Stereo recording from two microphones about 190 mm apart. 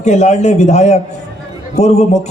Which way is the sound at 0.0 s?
35° left (ahead or behind).